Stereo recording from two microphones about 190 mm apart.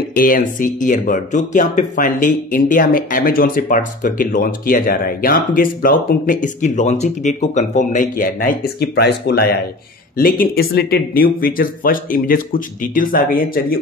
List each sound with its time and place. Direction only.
0.1 s speech: 45° left (ahead or behind)